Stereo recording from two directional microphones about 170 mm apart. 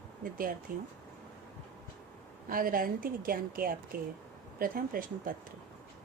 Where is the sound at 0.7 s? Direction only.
55° right (ahead or behind).